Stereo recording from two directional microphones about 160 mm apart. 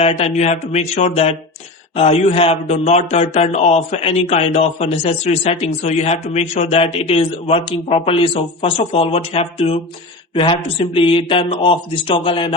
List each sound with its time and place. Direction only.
0.0 s a man's voice: 40° left (ahead or behind)